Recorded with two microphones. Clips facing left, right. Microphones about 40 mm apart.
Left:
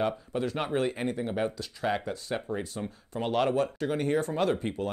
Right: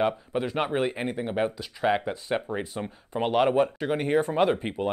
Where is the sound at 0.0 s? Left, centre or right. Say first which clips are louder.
Right 3 dB; centre.